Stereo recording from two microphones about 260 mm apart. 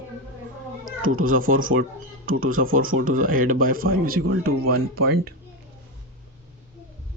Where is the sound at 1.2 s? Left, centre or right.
Right.